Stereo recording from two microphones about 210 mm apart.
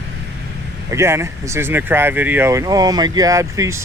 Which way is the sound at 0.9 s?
15° right (ahead or behind).